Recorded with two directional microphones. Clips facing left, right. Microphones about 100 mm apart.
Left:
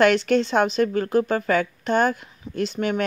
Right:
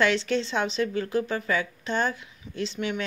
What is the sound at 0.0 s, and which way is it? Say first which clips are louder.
Speech: left 6 dB; 55° left (ahead or behind).